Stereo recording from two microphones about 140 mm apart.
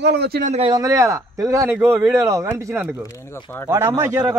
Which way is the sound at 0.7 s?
25° right (ahead or behind).